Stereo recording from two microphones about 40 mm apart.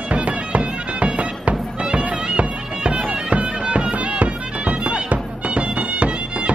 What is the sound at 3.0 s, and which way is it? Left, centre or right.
Bagpipes, right.